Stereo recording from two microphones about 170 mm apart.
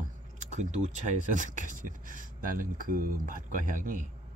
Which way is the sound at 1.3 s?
50° right (ahead or behind).